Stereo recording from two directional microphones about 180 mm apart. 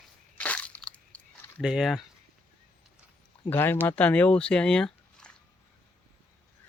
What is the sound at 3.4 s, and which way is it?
Speech, 10° left (ahead or behind).